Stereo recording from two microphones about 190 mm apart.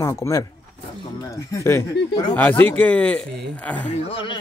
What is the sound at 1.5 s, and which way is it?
Speech, 15° left (ahead or behind).